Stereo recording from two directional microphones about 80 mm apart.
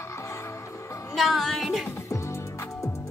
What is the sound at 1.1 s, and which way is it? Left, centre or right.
Speech, centre.